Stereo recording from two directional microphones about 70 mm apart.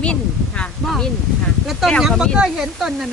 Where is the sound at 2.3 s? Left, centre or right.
Centre.